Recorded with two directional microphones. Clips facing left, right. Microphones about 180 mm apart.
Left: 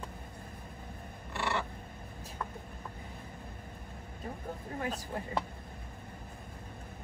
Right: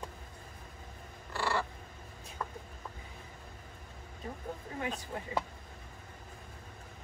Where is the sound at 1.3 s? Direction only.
20° left (ahead or behind).